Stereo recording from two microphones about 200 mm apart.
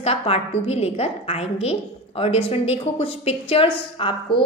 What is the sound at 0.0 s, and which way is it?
A woman's voice, 30° left (ahead or behind).